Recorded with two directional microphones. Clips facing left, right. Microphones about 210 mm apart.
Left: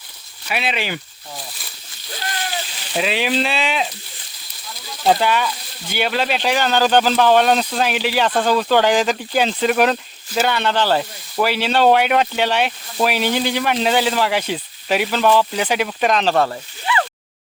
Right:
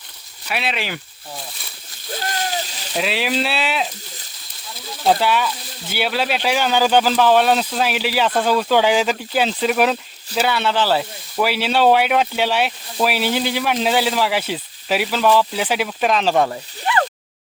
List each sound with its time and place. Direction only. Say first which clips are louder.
0.4 s speech: left 1 dB; centre (ahead or behind)
1.4 s slosh: left 1 dB; centre (ahead or behind)
2.1 s splash: right 3 dB; 45° right (ahead or behind)
2.9 s speech: left 2 dB; centre (ahead or behind)
5.0 s speech: even; centre (ahead or behind)
16.3 s speech: even; 15° right (ahead or behind)
16.9 s a sound: right 1 dB; 50° right (ahead or behind)